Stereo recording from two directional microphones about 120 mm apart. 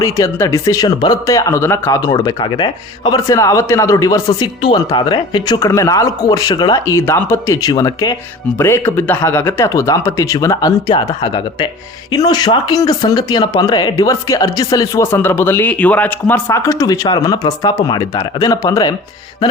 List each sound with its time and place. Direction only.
0.0 s speech: 25° left (ahead or behind)
3.2 s speech: 25° left (ahead or behind)
8.5 s speech: 20° left (ahead or behind)
15.0 s speech: 20° left (ahead or behind)
16.5 s speech: 25° left (ahead or behind)